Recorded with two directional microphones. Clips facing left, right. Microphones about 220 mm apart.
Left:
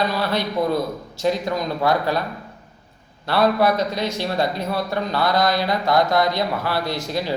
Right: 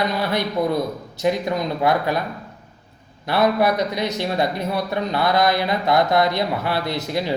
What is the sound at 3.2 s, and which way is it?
A man's voice, 20° right (ahead or behind).